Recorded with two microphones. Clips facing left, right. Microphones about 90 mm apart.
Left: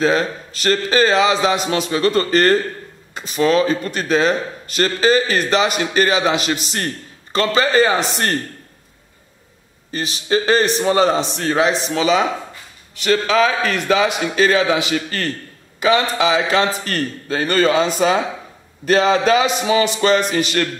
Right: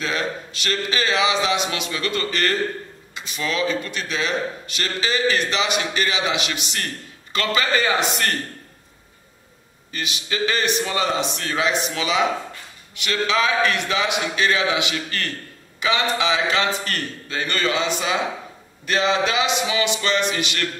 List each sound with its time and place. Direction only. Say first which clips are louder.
0.0 s speech: left 8 dB; 40° left (ahead or behind)
9.8 s speech: left 7 dB; 35° left (ahead or behind)